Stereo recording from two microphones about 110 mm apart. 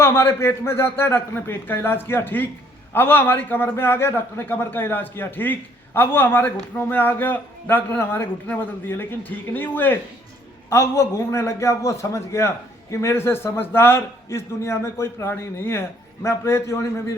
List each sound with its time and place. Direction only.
0.0 s a man's voice: 20° left (ahead or behind)